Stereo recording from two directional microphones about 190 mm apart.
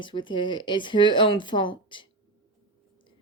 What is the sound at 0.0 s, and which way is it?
Speech, 25° left (ahead or behind).